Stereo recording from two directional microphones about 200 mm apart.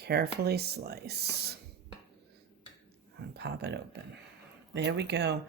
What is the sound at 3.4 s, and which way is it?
Speech, 55° right (ahead or behind).